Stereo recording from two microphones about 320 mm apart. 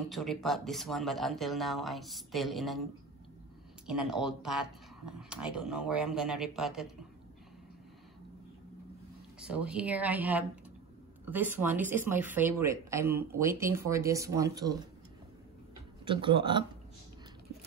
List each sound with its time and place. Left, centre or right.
0.1 s speech: centre
3.8 s speech: centre
9.4 s speech: centre
16.1 s speech: centre